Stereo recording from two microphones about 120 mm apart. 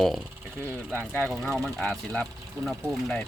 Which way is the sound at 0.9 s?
15° left (ahead or behind).